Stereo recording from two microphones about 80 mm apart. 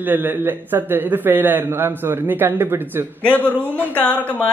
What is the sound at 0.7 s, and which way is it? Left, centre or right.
A man's voice, right.